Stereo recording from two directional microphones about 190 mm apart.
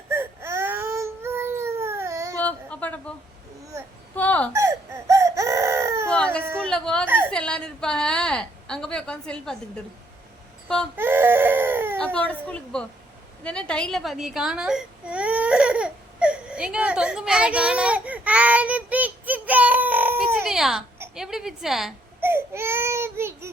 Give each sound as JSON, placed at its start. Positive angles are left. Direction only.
{"t": 0.1, "sound": "baby cry", "side_deg": -15}
{"t": 2.4, "sound": "a sound", "side_deg": 5}
{"t": 4.1, "sound": "hiccup", "side_deg": 10}
{"t": 4.5, "sound": "crying", "side_deg": -15}
{"t": 6.1, "sound": "baby cry", "side_deg": 5}
{"t": 6.6, "sound": "a sound", "side_deg": 5}
{"t": 10.9, "sound": "crying", "side_deg": -10}
{"t": 11.9, "sound": "a woman's voice", "side_deg": 5}
{"t": 13.4, "sound": "baby cry", "side_deg": 5}
{"t": 21.0, "sound": "a woman's voice", "side_deg": -5}
{"t": 22.2, "sound": "baby cry", "side_deg": -10}